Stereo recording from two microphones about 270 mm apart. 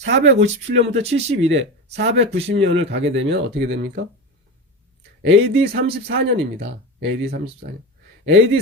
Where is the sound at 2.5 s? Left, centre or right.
Right.